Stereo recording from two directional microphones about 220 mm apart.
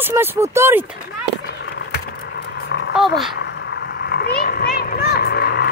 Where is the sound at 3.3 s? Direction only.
50° left (ahead or behind).